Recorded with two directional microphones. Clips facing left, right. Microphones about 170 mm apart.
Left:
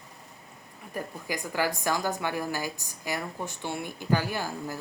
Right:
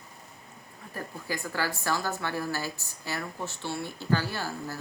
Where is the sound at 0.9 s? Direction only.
15° left (ahead or behind).